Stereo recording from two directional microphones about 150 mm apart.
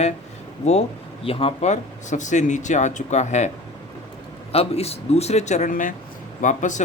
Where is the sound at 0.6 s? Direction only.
45° left (ahead or behind).